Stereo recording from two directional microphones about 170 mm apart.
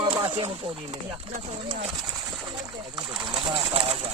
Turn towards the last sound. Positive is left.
turn(degrees=-35)  # may be behind; listen again after turning